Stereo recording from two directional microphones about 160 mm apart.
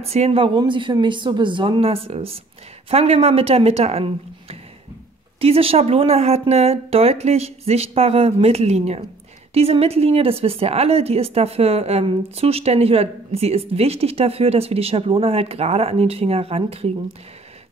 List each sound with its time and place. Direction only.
0.0 s speech: 40° right (ahead or behind)